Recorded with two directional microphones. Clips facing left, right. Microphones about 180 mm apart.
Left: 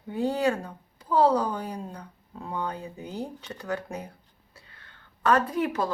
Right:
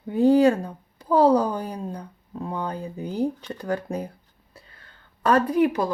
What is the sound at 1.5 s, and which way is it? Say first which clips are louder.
Speech: right 4 dB; 35° right (ahead or behind).